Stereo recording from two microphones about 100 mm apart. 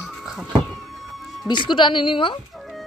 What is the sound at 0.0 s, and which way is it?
Cat, 5° right (ahead or behind).